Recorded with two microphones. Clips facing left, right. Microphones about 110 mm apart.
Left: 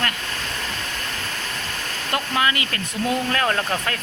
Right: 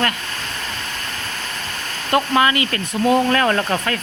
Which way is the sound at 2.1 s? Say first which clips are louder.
Right 6 dB; 55° right (ahead or behind).